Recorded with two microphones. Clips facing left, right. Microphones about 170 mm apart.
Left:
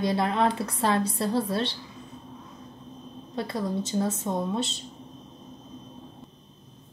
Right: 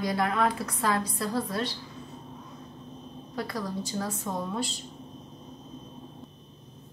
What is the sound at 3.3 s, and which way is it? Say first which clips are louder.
A woman's voice: left 4 dB; 25° left (ahead or behind).